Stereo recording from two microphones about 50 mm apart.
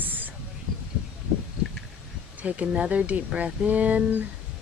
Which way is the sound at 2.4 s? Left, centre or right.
Right.